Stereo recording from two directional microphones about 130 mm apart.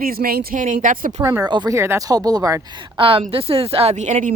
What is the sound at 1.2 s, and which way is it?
Speech, 30° right (ahead or behind).